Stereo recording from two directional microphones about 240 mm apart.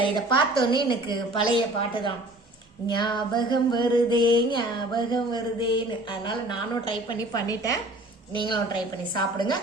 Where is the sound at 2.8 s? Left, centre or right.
Centre.